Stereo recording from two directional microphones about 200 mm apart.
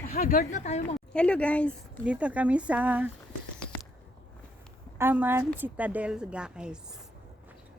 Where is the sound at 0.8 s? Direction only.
5° left (ahead or behind).